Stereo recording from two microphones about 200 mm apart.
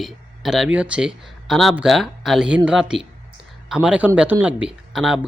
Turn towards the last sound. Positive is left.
turn(degrees=-5)  # may be behind; listen again after turning